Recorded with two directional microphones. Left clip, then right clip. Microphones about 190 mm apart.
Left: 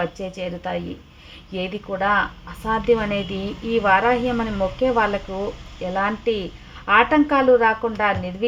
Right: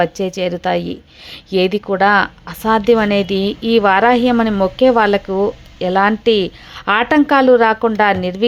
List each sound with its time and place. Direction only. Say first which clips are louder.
0.0 s speech: right 10 dB; 35° right (ahead or behind)